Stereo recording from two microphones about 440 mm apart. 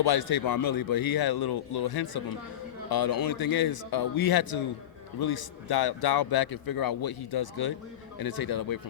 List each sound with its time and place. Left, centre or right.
0.0 s a man's voice: left